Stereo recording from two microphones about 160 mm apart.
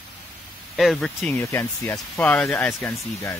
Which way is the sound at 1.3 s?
15° left (ahead or behind).